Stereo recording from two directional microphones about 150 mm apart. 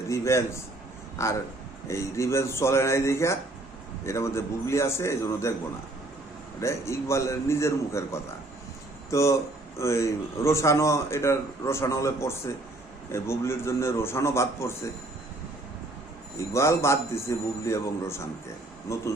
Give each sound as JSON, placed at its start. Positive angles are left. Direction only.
{"t": 0.1, "sound": "a sound", "side_deg": 20}
{"t": 1.2, "sound": "a man's voice", "side_deg": 20}
{"t": 6.6, "sound": "a man's voice", "side_deg": 20}
{"t": 16.4, "sound": "a man's voice", "side_deg": 20}